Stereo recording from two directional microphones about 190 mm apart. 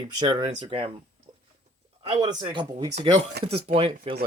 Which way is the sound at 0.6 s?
30° right (ahead or behind).